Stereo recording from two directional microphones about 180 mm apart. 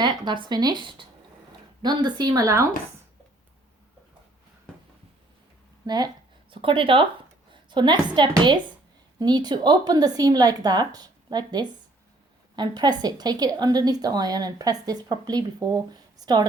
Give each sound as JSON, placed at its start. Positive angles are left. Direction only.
{"t": 0.0, "sound": "a woman's voice", "side_deg": -25}
{"t": 5.8, "sound": "a woman's voice", "side_deg": -25}